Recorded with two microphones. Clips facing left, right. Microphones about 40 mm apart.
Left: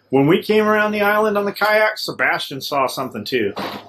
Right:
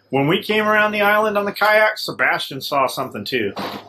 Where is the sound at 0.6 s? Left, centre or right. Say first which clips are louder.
Even; centre.